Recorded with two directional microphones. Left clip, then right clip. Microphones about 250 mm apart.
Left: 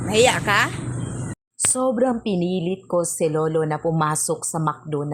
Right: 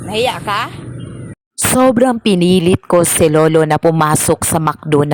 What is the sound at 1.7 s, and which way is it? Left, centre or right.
A woman's voice, right.